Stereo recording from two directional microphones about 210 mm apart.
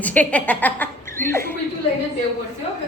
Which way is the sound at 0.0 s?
5° left (ahead or behind).